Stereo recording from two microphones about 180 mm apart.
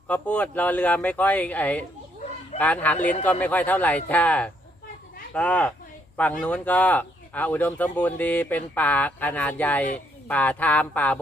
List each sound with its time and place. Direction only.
0.1 s speech: 10° left (ahead or behind)